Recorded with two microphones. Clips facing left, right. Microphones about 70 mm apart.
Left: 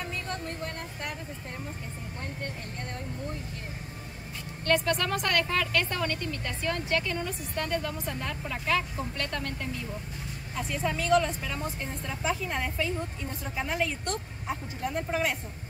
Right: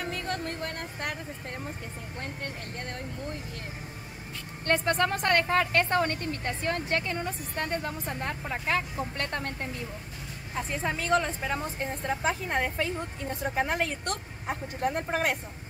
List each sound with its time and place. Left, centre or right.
0.0 s vehicle: right
4.6 s speech: right
10.7 s speech: right